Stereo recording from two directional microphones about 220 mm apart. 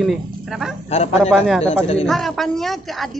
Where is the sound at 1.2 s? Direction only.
Centre (ahead or behind).